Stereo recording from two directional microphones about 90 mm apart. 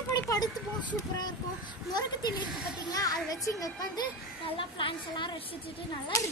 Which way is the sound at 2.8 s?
45° left (ahead or behind).